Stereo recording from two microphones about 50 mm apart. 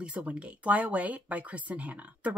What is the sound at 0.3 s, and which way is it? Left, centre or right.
Speech, right.